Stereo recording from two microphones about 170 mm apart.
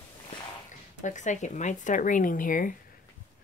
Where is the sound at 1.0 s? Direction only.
45° left (ahead or behind).